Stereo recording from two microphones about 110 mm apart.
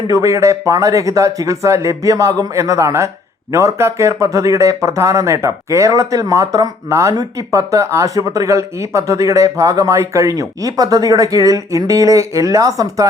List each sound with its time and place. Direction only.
0.1 s speech: 30° right (ahead or behind)